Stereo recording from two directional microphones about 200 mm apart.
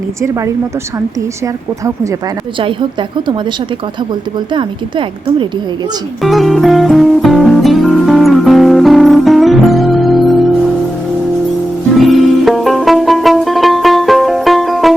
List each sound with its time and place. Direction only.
0.2 s a woman's voice: 15° right (ahead or behind)
4.5 s speech: 25° right (ahead or behind)
6.2 s music: centre (ahead or behind)
11.9 s music: centre (ahead or behind)